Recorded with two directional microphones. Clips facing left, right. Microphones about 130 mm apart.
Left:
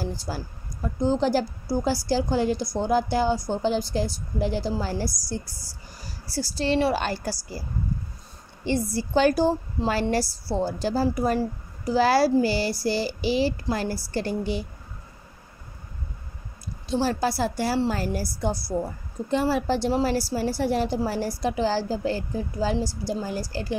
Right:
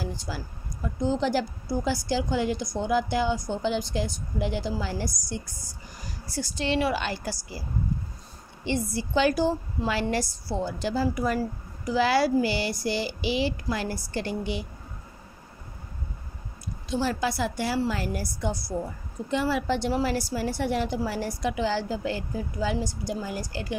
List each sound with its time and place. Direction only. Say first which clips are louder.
0.0 s a sound: left 3 dB; 35° left (ahead or behind)
1.0 s a woman's voice: left 3 dB; 35° left (ahead or behind)
8.9 s a woman's voice: left 3 dB; 40° left (ahead or behind)
16.9 s a woman's voice: left 3 dB; 35° left (ahead or behind)